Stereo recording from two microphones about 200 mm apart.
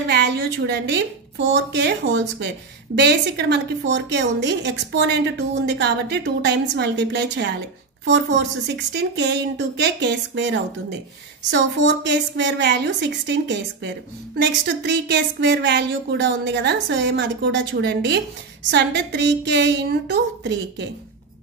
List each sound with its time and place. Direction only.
0.1 s a woman's voice: 55° right (ahead or behind)